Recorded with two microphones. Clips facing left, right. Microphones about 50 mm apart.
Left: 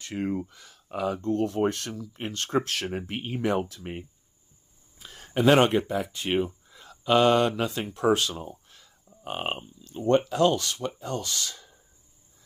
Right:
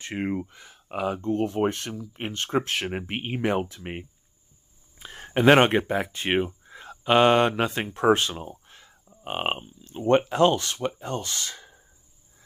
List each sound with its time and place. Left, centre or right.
0.0 s speech: right